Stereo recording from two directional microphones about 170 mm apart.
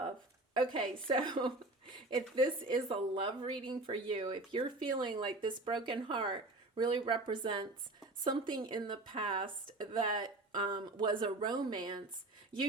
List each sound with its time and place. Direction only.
0.5 s a woman's voice: 30° right (ahead or behind)